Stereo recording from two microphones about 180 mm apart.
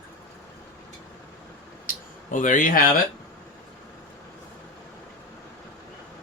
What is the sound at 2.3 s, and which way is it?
Speech, 45° left (ahead or behind).